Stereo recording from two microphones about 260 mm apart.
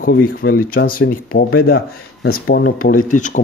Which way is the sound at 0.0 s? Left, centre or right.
Left.